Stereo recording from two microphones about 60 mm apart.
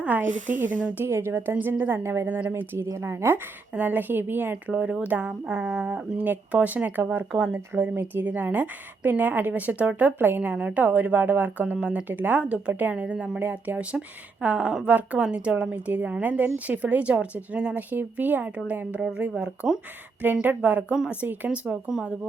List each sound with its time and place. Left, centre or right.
0.0 s speech: right
1.0 s a woman's voice: right
2.2 s a woman's voice: right
2.5 s a woman's voice: right
3.8 s a woman's voice: right
4.7 s a woman's voice: right
18.9 s speech: centre
20.2 s speech: right